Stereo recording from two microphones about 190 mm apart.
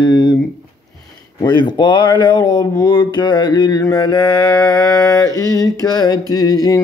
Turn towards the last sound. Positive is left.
turn(degrees=20)  # may be behind; listen again after turning